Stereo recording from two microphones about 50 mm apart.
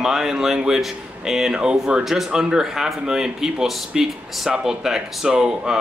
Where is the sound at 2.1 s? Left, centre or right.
Centre.